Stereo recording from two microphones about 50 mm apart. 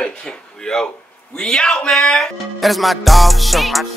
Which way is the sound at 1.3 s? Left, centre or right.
Centre.